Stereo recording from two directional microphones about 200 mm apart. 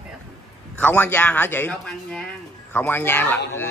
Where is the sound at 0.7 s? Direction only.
10° left (ahead or behind).